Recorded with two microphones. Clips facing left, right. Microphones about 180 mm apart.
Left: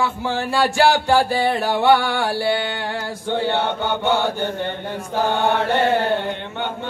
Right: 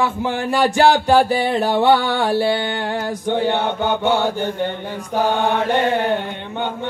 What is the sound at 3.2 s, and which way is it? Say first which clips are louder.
Mantra: right 1 dB; 15° right (ahead or behind).